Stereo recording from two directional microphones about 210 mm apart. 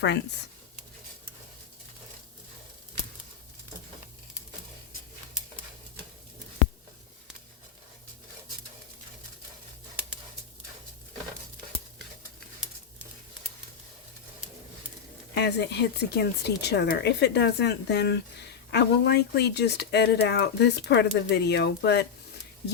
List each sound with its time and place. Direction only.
15.4 s speech: 55° left (ahead or behind)